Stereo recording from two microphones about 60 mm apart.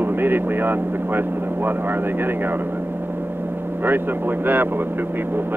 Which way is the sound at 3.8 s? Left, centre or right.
Right.